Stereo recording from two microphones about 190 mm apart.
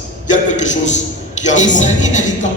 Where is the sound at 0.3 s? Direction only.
40° left (ahead or behind).